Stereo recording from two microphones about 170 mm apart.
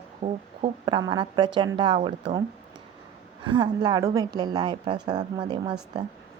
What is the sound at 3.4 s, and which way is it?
A woman's voice, 25° right (ahead or behind).